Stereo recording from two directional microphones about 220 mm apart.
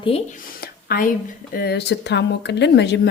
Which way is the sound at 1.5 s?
45° left (ahead or behind).